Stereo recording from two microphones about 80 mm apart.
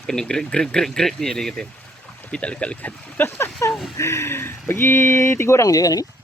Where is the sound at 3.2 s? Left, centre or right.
Left.